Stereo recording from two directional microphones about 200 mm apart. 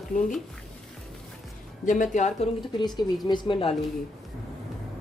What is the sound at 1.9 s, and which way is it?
Speech, 40° left (ahead or behind).